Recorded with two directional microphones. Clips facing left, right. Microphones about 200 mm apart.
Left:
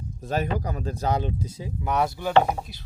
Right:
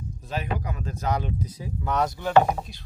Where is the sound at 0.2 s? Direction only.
45° left (ahead or behind); by 1.9 s 25° left (ahead or behind).